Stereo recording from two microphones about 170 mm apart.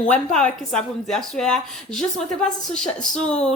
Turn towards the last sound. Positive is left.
turn(degrees=5)  # may be behind; listen again after turning